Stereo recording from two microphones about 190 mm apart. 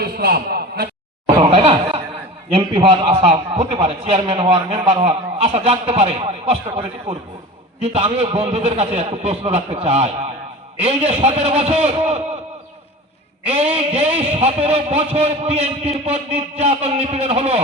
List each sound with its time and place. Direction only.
0.0 s a man's voice: 55° right (ahead or behind)
1.4 s chuckle: 30° right (ahead or behind)
2.5 s a man's voice: 30° right (ahead or behind)
13.7 s a man's voice: 35° right (ahead or behind)